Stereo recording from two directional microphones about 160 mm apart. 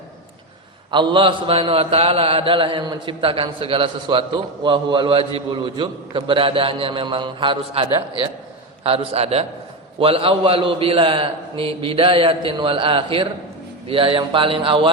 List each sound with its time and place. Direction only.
0.9 s a man's voice: 30° right (ahead or behind)